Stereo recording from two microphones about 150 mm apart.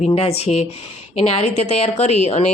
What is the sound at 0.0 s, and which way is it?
Speech, 45° left (ahead or behind).